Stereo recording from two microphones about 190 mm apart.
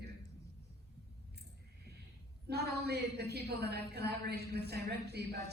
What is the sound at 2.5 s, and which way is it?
A woman's voice, 60° right (ahead or behind).